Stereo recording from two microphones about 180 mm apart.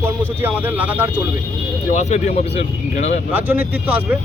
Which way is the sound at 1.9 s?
40° left (ahead or behind).